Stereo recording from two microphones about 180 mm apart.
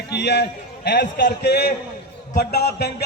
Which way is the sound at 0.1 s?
65° left (ahead or behind).